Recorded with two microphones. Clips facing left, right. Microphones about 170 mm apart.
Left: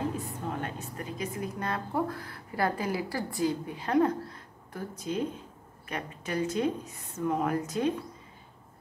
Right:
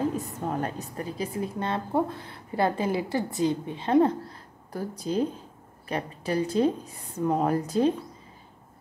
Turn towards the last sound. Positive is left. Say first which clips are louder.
# right 5 dB
turn(degrees=-30)  # may be behind; listen again after turning